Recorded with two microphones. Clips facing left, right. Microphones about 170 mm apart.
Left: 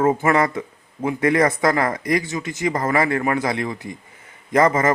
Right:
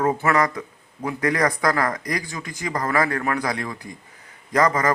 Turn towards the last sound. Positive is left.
turn(degrees=25)  # may be behind; listen again after turning